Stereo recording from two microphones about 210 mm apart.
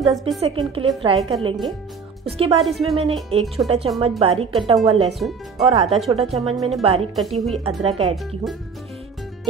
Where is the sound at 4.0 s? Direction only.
25° right (ahead or behind).